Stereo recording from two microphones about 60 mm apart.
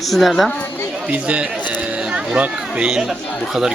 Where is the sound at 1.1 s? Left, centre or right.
Right.